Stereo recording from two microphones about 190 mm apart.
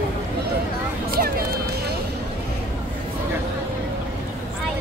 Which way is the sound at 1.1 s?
50° right (ahead or behind).